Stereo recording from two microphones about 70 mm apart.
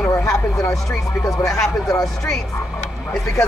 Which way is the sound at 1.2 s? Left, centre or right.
Left.